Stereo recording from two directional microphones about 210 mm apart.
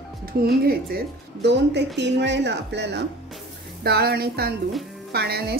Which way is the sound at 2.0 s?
55° right (ahead or behind).